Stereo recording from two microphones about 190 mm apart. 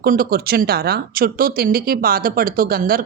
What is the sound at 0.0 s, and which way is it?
Speech, 50° right (ahead or behind).